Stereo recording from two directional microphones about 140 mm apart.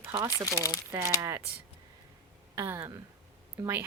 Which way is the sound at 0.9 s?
20° right (ahead or behind).